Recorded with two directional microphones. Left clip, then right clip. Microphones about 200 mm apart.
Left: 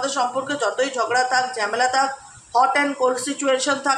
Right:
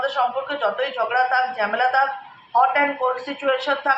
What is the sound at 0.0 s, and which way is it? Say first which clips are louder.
Speech: right 1 dB; 55° left (ahead or behind).